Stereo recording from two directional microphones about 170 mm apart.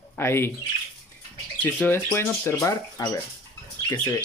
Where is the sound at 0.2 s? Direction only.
15° left (ahead or behind).